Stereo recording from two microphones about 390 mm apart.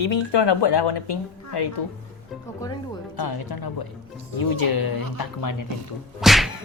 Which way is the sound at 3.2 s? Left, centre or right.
Left.